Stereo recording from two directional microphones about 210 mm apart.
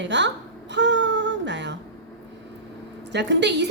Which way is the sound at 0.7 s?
60° right (ahead or behind).